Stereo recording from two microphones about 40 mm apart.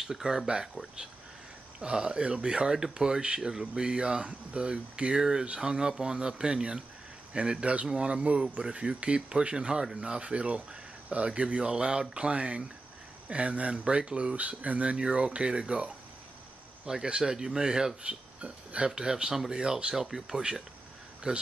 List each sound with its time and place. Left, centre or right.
0.0 s speech: centre
1.8 s speech: right
18.4 s speech: right
18.9 s speech: centre